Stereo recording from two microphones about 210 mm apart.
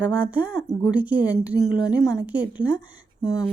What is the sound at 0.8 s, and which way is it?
Speech, 5° right (ahead or behind).